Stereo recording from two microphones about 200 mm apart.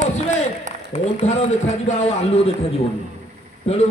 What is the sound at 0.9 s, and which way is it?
A man's voice, 35° left (ahead or behind).